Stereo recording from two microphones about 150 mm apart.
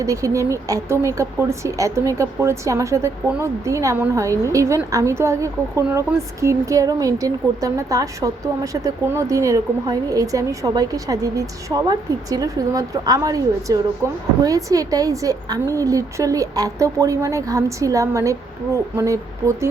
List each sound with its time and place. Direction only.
0.0 s a woman's voice: 20° right (ahead or behind)